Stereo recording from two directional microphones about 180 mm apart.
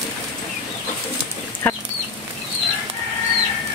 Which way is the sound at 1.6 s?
10° left (ahead or behind).